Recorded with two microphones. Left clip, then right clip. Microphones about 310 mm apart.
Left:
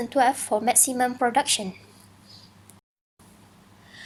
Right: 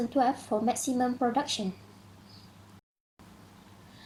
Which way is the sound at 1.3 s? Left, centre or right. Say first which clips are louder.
Left 7 dB; left.